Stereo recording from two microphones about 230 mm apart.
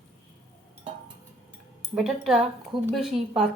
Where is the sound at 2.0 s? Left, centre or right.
Centre.